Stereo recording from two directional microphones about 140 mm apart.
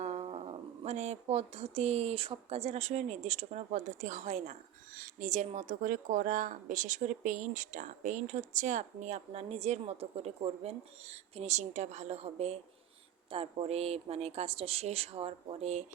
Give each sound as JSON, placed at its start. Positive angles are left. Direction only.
{"t": 0.0, "sound": "speech", "side_deg": -50}